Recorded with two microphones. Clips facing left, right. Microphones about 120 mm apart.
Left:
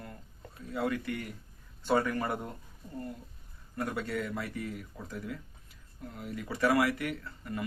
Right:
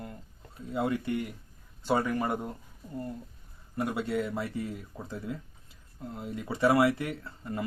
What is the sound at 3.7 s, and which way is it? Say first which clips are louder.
Speech: right 4 dB; 15° right (ahead or behind).